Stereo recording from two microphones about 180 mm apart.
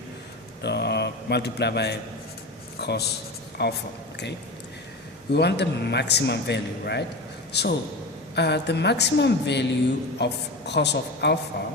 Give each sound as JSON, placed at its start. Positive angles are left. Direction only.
{"t": 0.6, "sound": "a man's voice", "side_deg": 70}
{"t": 5.3, "sound": "a man's voice", "side_deg": 65}